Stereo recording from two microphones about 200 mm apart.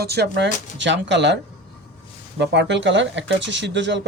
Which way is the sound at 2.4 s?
60° right (ahead or behind).